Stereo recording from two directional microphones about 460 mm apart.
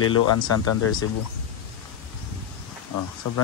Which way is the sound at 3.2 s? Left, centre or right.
Left.